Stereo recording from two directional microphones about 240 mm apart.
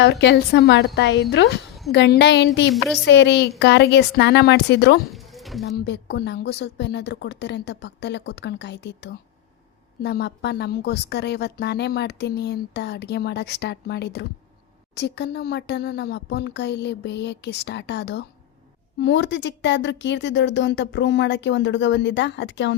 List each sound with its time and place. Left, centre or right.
0.0 s a woman's voice: left
5.1 s a sound: centre
5.6 s a woman's voice: left